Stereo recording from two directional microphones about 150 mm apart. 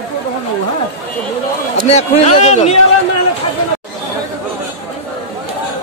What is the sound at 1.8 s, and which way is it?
Speech, 45° left (ahead or behind).